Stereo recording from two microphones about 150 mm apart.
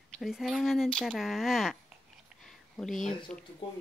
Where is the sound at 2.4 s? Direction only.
5° left (ahead or behind).